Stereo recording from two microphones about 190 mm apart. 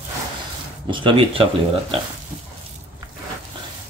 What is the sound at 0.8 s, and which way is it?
Speech, 25° right (ahead or behind).